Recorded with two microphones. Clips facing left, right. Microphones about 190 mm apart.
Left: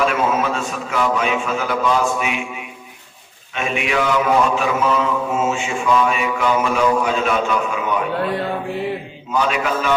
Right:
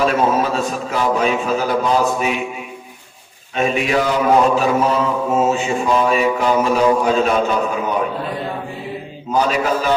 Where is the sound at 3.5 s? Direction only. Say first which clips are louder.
Right 4 dB; 35° right (ahead or behind).